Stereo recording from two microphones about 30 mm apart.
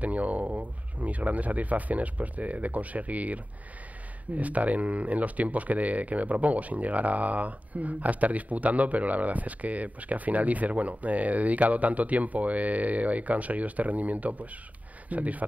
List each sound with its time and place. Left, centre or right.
0.0 s speech: right